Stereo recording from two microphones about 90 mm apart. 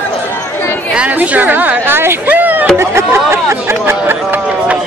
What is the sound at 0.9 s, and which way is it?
Speech, 15° right (ahead or behind).